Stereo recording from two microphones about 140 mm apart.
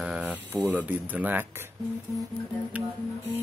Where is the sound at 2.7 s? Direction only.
10° right (ahead or behind).